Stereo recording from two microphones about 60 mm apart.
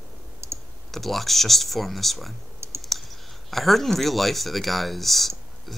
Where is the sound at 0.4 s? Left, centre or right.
Right.